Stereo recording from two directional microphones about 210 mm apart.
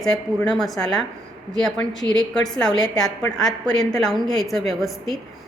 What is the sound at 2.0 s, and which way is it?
Speech, 20° left (ahead or behind).